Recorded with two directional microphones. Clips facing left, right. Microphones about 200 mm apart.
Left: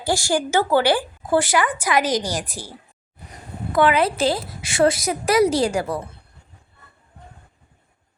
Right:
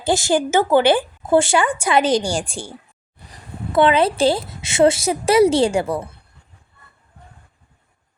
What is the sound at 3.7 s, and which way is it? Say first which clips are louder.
A woman's voice: right 3 dB; 25° right (ahead or behind).